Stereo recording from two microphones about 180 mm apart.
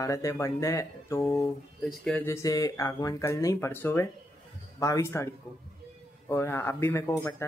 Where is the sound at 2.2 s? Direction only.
15° left (ahead or behind).